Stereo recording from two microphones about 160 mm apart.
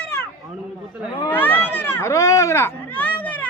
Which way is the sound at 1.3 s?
10° left (ahead or behind).